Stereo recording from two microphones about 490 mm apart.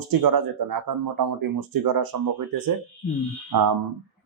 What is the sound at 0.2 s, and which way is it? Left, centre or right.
Speech, right.